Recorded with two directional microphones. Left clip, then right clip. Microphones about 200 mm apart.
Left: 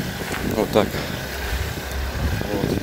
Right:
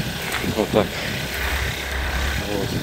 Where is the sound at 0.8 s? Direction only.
30° left (ahead or behind).